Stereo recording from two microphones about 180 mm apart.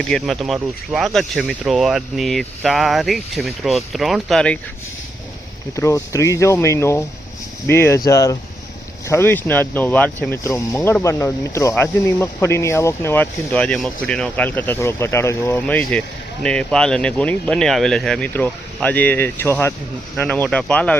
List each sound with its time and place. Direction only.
0.1 s speech: centre (ahead or behind)
5.7 s speech: 15° left (ahead or behind)